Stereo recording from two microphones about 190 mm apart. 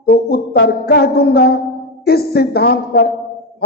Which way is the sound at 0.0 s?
55° left (ahead or behind).